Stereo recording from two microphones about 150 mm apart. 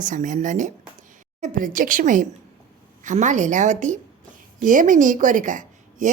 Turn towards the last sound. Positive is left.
turn(degrees=-60)  # may be behind; listen again after turning